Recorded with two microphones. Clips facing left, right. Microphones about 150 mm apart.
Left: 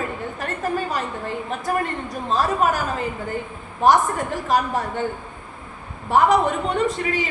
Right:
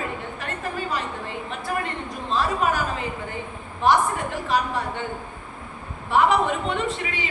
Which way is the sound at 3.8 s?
45° left (ahead or behind).